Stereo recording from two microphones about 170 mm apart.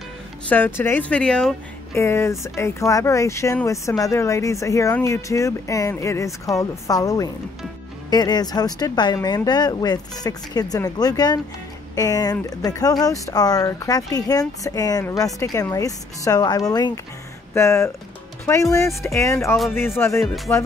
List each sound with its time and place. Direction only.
0.5 s speech: 10° left (ahead or behind)
2.0 s speech: 15° left (ahead or behind)